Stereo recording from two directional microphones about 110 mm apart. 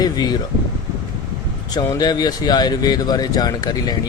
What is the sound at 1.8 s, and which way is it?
Speech, 35° left (ahead or behind).